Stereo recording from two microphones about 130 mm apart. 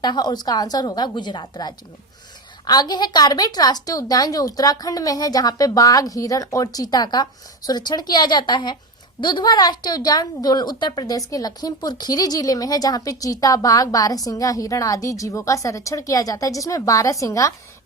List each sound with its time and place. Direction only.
0.0 s a woman's voice: 35° left (ahead or behind)